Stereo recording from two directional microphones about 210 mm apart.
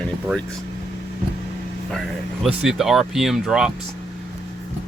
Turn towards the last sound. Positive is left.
turn(degrees=-5)  # may be behind; listen again after turning